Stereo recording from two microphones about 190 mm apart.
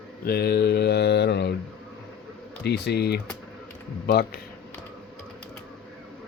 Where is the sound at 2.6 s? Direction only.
60° left (ahead or behind).